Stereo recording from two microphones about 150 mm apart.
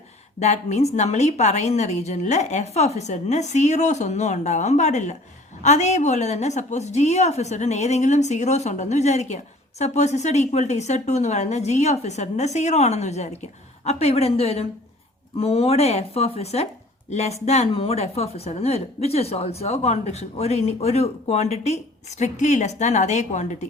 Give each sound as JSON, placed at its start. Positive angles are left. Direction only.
{"t": 0.3, "sound": "a woman's voice", "side_deg": 50}